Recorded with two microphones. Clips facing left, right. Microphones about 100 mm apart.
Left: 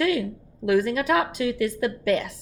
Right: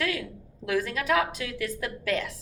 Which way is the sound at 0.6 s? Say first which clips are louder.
Left 7 dB; 20° left (ahead or behind).